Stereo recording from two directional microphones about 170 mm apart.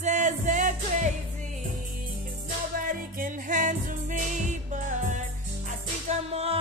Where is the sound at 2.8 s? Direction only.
55° right (ahead or behind).